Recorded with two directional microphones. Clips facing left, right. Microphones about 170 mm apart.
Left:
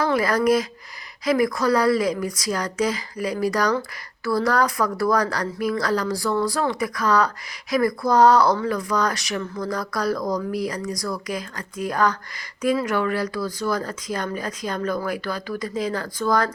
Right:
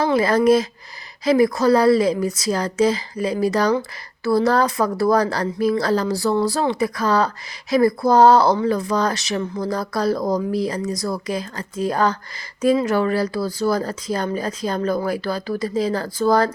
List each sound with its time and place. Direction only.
0.0 s speech: 25° right (ahead or behind)